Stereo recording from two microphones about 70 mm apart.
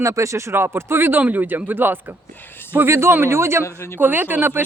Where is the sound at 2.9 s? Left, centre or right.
Right.